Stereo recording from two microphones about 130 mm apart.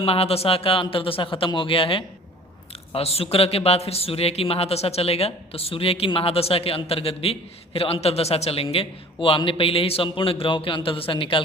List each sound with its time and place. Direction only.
0.0 s a man's voice: 50° left (ahead or behind)